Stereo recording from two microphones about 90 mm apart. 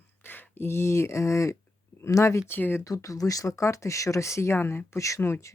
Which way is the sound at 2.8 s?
40° left (ahead or behind).